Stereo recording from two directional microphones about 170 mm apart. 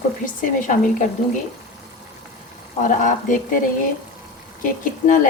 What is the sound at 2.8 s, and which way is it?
Speech, 50° left (ahead or behind).